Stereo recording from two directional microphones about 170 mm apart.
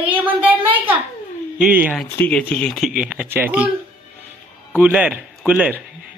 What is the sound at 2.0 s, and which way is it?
Speech, 5° left (ahead or behind).